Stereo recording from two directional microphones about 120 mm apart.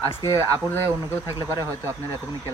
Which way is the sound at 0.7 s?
20° left (ahead or behind).